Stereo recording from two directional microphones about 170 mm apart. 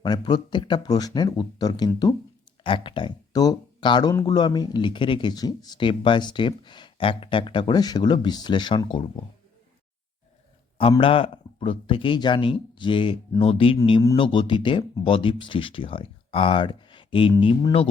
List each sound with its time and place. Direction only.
0.0 s speech: 25° left (ahead or behind)
10.9 s speech: 30° left (ahead or behind)